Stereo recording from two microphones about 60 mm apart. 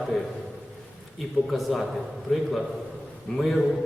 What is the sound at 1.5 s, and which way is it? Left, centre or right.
Speech, centre.